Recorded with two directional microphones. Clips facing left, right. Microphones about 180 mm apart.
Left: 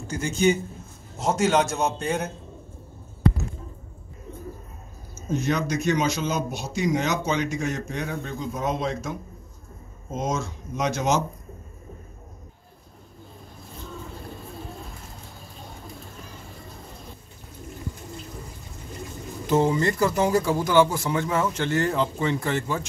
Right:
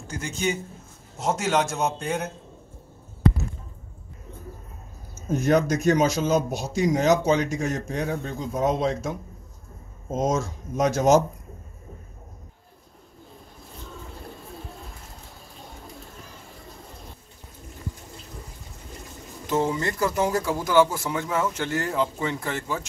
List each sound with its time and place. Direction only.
0.1 s speech: centre (ahead or behind)
5.4 s speech: 50° right (ahead or behind)
10.1 s speech: 40° right (ahead or behind)
19.4 s speech: centre (ahead or behind)